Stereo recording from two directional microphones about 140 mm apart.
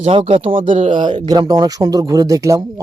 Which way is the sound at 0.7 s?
55° right (ahead or behind).